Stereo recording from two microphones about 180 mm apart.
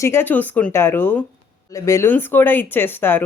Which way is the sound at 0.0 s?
15° left (ahead or behind).